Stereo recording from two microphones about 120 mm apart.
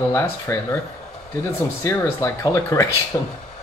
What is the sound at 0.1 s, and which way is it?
Speech, 25° left (ahead or behind).